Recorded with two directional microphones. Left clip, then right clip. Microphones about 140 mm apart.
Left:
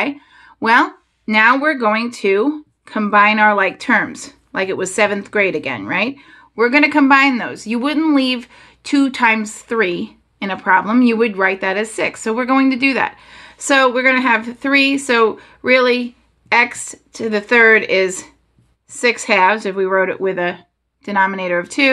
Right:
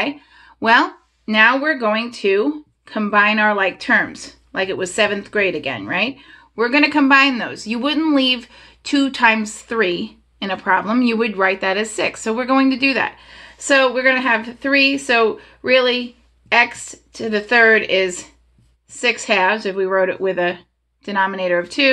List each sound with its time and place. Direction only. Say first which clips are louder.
0.6 s speech: left 1 dB; 35° left (ahead or behind)
1.2 s speech: left 2 dB; 45° left (ahead or behind)